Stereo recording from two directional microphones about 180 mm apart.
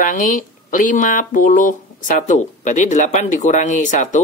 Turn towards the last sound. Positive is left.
turn(degrees=45)  # may be behind; listen again after turning